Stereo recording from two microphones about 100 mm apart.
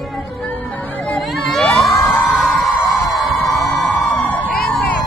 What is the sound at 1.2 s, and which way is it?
Crowd, centre (ahead or behind).